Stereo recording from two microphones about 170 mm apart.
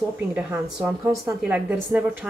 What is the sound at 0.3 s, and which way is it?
A woman's voice, 10° right (ahead or behind).